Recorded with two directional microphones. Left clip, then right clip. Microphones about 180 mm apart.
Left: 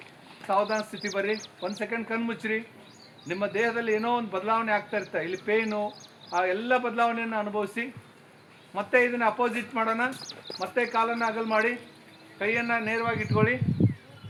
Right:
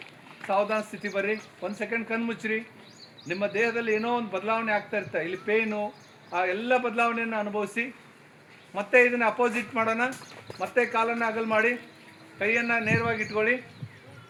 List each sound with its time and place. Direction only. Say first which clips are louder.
0.4 s a man's voice: even; 25° right (ahead or behind)